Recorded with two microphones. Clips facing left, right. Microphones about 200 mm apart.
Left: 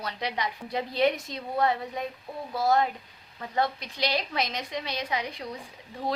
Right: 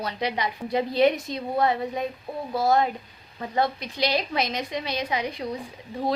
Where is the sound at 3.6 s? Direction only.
10° right (ahead or behind).